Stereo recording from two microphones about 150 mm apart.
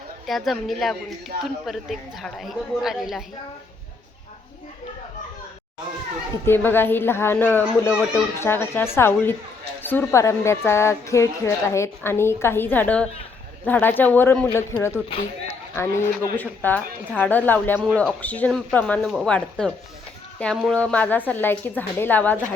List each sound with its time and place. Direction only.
0.3 s a woman's voice: centre (ahead or behind)
6.4 s a woman's voice: 15° left (ahead or behind)